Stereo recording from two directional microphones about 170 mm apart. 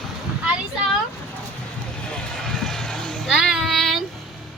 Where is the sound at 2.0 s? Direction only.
5° left (ahead or behind).